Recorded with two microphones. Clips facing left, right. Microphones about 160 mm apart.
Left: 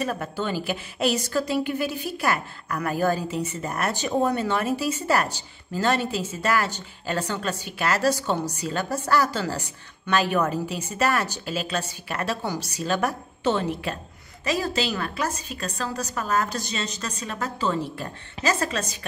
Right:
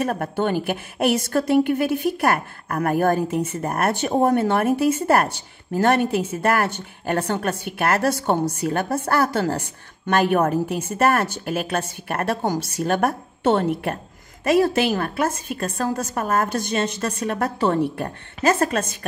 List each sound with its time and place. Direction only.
0.0 s a woman's voice: 55° right (ahead or behind)